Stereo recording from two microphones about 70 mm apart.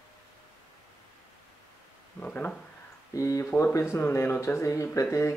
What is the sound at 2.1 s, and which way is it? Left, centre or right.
Speech, left.